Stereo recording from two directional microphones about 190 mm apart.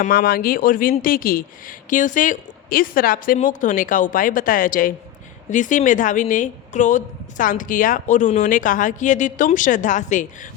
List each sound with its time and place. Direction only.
0.0 s a woman's voice: 50° left (ahead or behind)